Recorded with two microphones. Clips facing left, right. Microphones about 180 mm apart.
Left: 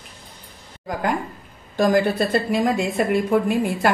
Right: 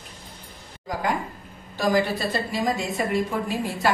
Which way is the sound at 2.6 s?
60° left (ahead or behind).